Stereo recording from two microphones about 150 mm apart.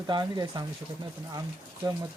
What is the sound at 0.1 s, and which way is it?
Speech, 30° right (ahead or behind).